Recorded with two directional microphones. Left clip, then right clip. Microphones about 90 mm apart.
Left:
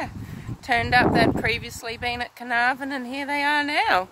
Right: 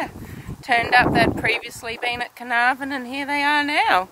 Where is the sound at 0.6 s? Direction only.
35° left (ahead or behind).